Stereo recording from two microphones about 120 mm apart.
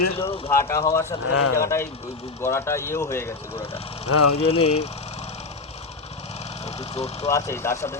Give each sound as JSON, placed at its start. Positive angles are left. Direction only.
{"t": 0.4, "sound": "speech", "side_deg": 25}
{"t": 3.7, "sound": "speech", "side_deg": 55}
{"t": 6.7, "sound": "speech", "side_deg": 60}
{"t": 7.3, "sound": "speech", "side_deg": 25}